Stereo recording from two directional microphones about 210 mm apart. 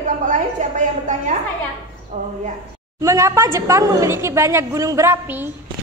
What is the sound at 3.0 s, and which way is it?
A woman's voice, 15° right (ahead or behind).